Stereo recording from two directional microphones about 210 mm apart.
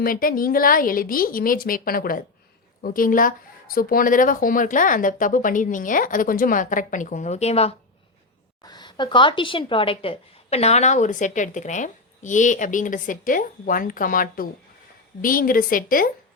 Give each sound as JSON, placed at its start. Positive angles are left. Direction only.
{"t": 0.0, "sound": "a woman's voice", "side_deg": 45}